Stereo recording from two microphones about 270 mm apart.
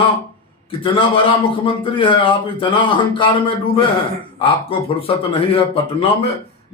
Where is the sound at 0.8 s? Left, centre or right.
Centre.